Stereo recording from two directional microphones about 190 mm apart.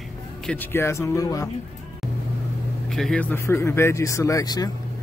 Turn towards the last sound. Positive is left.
turn(degrees=20)  # may be behind; listen again after turning